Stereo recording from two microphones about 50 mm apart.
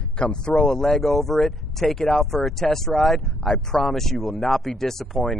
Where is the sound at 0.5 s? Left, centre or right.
Left.